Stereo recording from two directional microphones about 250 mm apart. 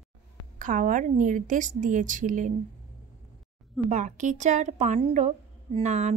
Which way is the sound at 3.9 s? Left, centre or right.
Right.